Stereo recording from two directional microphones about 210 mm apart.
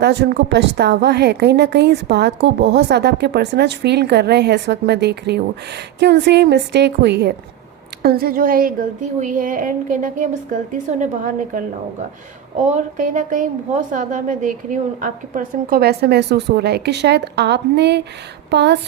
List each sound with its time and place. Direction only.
0.0 s a woman's voice: 50° right (ahead or behind)